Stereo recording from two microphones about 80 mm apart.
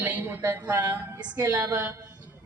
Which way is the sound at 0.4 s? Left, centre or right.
Right.